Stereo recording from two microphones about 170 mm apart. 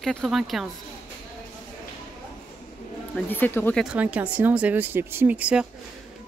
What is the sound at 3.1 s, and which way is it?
Speech, 10° left (ahead or behind).